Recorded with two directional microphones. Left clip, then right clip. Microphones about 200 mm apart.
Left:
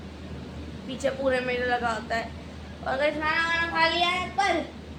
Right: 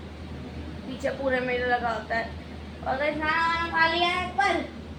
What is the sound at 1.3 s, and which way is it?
Speech, 5° left (ahead or behind).